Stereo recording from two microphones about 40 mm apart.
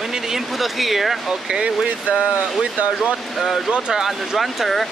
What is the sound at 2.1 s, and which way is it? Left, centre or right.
Speech, right.